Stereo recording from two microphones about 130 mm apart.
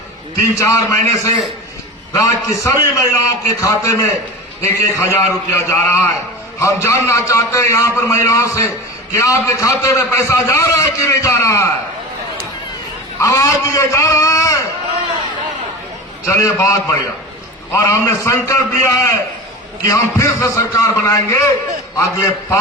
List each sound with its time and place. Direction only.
0.6 s a man's voice: 25° left (ahead or behind)
13.1 s a man's voice: 25° left (ahead or behind)
16.2 s a man's voice: 20° left (ahead or behind)